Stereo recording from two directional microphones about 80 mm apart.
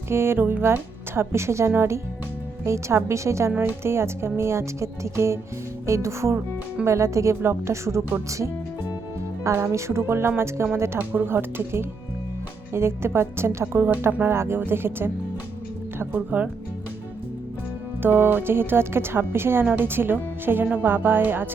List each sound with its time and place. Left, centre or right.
0.1 s a woman's voice: right
3.5 s speech: centre
3.8 s a woman's voice: right
9.7 s a woman's voice: right
18.0 s speech: right